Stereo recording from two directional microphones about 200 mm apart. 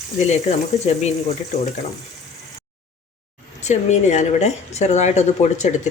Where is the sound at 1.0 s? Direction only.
35° left (ahead or behind).